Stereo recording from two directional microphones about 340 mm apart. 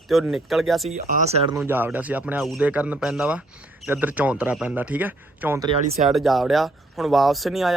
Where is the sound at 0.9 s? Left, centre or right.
Right.